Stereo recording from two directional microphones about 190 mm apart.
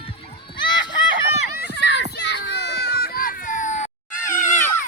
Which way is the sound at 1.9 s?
65° left (ahead or behind).